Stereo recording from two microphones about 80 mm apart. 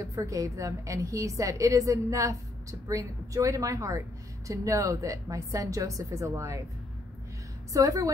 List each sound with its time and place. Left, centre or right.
0.0 s a woman's voice: right
7.7 s a woman's voice: right